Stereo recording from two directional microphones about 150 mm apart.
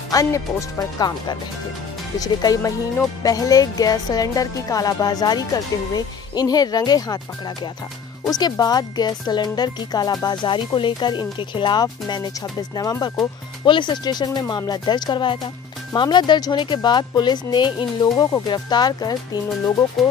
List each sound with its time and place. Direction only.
0.1 s speech: 20° left (ahead or behind)